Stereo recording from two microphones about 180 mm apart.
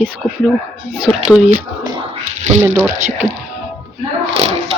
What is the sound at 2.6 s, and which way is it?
Speech, 10° right (ahead or behind).